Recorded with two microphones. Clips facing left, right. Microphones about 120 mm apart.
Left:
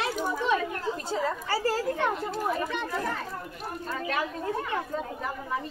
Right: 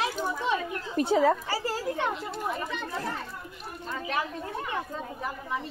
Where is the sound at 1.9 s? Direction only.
45° left (ahead or behind).